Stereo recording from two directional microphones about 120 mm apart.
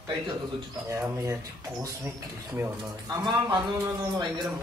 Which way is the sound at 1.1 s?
25° right (ahead or behind).